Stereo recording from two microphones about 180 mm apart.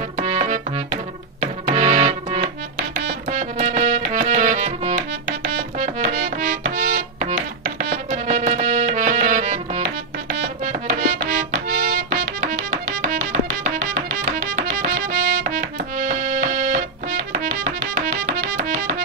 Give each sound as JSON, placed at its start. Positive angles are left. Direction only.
{"t": 0.2, "sound": "music", "side_deg": -40}
{"t": 5.5, "sound": "music", "side_deg": -50}